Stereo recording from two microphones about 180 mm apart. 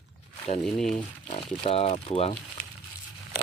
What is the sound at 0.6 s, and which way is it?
Speech, centre (ahead or behind).